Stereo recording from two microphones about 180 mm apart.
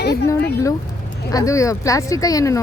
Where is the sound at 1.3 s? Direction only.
20° left (ahead or behind).